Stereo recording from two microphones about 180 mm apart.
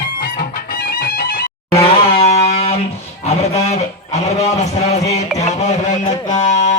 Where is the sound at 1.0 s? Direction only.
55° left (ahead or behind).